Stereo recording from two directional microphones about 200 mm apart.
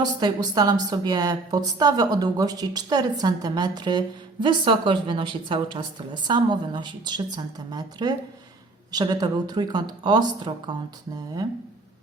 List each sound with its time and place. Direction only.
0.0 s a woman's voice: 20° right (ahead or behind)